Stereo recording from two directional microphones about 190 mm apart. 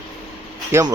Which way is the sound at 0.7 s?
15° right (ahead or behind).